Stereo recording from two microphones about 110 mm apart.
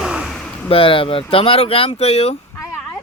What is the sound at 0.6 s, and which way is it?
Speech, 55° left (ahead or behind).